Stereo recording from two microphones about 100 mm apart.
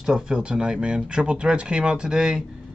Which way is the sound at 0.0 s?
5° right (ahead or behind).